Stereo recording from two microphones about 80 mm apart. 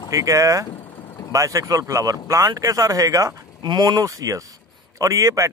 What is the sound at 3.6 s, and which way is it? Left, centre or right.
Speech, right.